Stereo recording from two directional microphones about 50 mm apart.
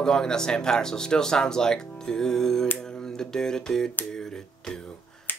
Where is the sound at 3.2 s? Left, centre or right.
Centre.